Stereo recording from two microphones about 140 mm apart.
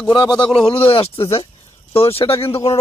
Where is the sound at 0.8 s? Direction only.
40° left (ahead or behind).